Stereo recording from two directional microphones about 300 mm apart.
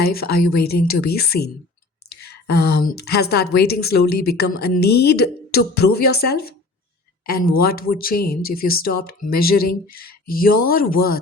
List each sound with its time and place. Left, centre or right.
0.0 s a woman's voice: left